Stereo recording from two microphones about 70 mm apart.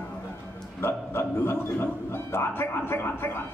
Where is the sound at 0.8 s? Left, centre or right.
Left.